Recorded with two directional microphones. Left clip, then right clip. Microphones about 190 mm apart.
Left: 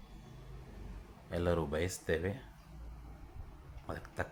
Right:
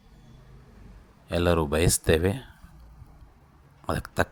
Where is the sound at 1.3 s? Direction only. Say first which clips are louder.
Right 10 dB; 30° right (ahead or behind).